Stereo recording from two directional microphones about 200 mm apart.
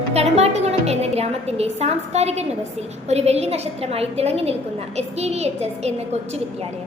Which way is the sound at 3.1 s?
30° right (ahead or behind).